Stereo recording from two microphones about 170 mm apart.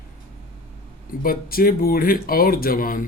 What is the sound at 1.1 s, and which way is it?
Speech, 60° left (ahead or behind).